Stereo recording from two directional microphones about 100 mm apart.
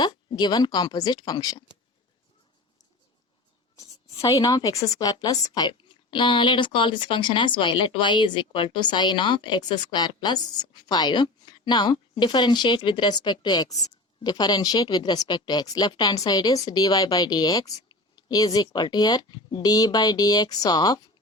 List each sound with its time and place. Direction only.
0.0 s speech: 45° left (ahead or behind)
3.8 s speech: 35° left (ahead or behind)